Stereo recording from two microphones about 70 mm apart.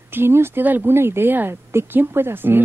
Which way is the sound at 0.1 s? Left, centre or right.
Right.